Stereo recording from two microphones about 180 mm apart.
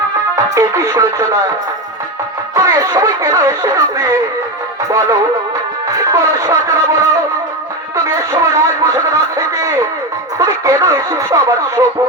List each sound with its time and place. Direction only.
0.3 s music: 15° right (ahead or behind)
2.6 s speech: 15° right (ahead or behind)